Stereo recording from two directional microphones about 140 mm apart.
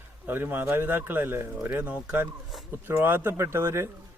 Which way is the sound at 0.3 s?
15° right (ahead or behind).